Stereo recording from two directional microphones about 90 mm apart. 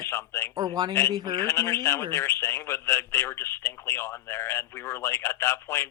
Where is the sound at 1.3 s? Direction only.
30° left (ahead or behind).